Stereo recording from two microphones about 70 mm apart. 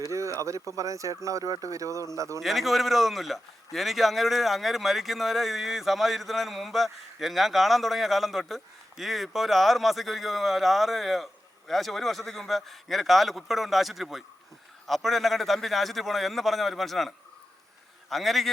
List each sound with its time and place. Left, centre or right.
0.1 s a sound: right
0.8 s speech: right
2.4 s a man's voice: centre